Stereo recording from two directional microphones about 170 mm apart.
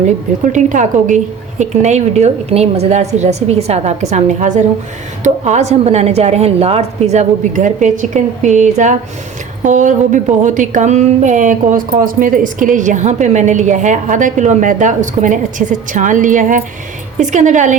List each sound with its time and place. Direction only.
0.5 s a woman's voice: 50° right (ahead or behind)